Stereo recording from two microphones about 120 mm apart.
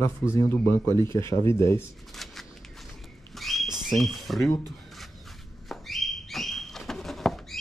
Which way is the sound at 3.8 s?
Centre (ahead or behind).